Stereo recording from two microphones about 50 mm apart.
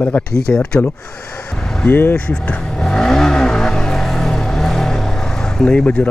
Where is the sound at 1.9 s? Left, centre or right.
Left.